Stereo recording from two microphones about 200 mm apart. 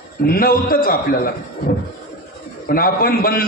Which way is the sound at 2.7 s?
45° left (ahead or behind).